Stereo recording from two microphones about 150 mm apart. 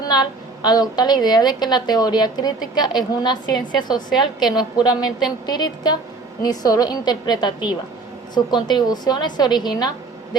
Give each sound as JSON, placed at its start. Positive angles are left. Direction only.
{"t": 0.0, "sound": "a woman's voice", "side_deg": 30}